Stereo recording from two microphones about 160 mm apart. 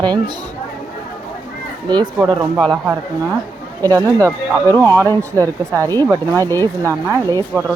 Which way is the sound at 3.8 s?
15° left (ahead or behind).